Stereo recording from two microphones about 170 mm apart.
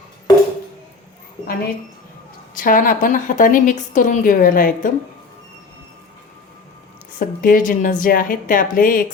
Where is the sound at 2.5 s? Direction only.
50° left (ahead or behind).